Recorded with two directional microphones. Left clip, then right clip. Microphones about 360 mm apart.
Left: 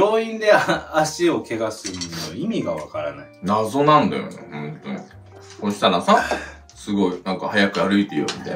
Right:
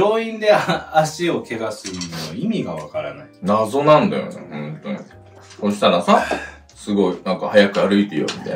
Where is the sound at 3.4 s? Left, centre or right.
Centre.